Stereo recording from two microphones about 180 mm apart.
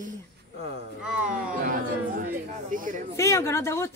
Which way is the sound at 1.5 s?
50° right (ahead or behind).